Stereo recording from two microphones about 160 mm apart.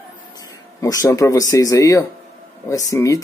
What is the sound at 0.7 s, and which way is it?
Speech, 20° left (ahead or behind).